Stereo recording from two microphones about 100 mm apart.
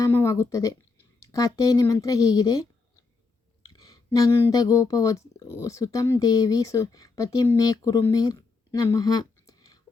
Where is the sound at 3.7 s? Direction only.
40° left (ahead or behind).